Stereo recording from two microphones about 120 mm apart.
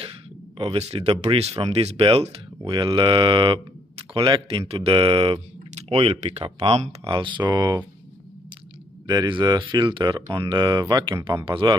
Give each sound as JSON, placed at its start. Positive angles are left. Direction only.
{"t": 0.6, "sound": "speech", "side_deg": -55}
{"t": 7.1, "sound": "speech", "side_deg": -40}
{"t": 9.0, "sound": "speech", "side_deg": -40}